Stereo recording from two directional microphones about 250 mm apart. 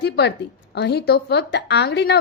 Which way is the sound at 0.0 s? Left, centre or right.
Left.